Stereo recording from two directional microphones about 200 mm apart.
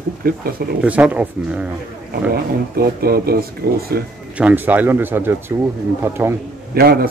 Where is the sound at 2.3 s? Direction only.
50° right (ahead or behind).